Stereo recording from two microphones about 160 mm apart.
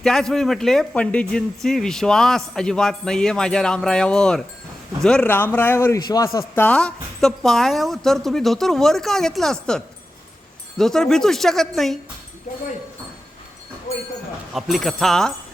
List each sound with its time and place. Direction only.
0.0 s a man's voice: centre (ahead or behind)
12.5 s speech: 50° left (ahead or behind)
14.5 s a man's voice: centre (ahead or behind)